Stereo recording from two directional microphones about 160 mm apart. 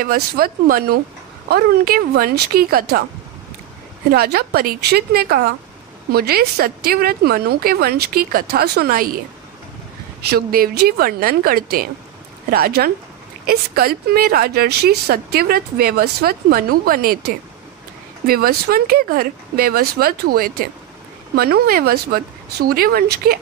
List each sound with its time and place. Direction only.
0.0 s speech: 65° right (ahead or behind)
4.1 s speech: 75° right (ahead or behind)
10.3 s speech: 70° right (ahead or behind)
18.2 s speech: 70° right (ahead or behind)